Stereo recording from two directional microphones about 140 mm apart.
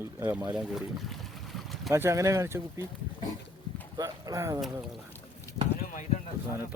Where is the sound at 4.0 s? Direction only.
25° right (ahead or behind).